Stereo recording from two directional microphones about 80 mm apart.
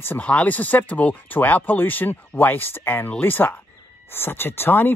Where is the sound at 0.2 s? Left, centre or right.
Centre.